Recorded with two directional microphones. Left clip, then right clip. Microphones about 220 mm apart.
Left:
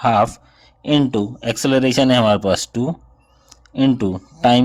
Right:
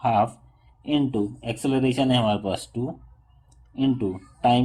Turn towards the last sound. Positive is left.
turn(degrees=45)  # may be behind; listen again after turning